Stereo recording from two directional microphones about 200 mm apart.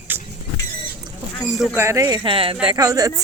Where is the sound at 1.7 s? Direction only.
15° right (ahead or behind).